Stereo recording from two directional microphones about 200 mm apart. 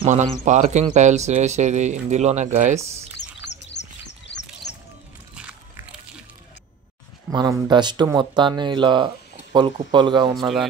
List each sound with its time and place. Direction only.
0.0 s speech: 35° right (ahead or behind)
3.2 s chirp: 60° left (ahead or behind)
5.3 s biting: 5° right (ahead or behind)
7.2 s speech: 20° right (ahead or behind)